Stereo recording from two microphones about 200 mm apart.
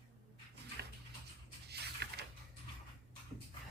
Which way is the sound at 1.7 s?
55° right (ahead or behind).